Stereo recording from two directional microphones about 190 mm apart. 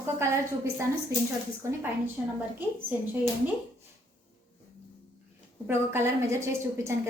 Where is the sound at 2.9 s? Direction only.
10° right (ahead or behind).